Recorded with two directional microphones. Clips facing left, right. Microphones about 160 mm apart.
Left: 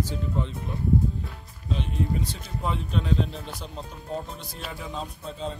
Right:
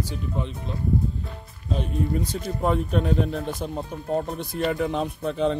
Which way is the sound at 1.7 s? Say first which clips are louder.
Right 3 dB; 45° right (ahead or behind).